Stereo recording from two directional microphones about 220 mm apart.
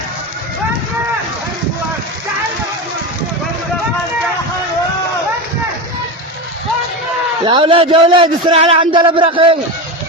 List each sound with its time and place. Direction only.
7.4 s a man's voice: 25° right (ahead or behind)